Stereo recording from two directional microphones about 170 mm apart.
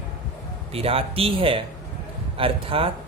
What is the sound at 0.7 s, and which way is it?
A man's voice, 35° right (ahead or behind).